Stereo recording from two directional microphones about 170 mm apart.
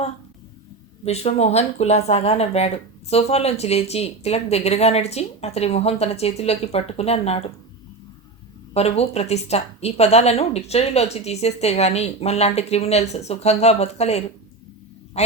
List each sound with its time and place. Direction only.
1.0 s speech: 40° left (ahead or behind)
8.7 s speech: 35° left (ahead or behind)